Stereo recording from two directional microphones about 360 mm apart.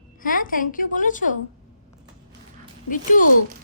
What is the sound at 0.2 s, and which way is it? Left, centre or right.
A woman's voice, left.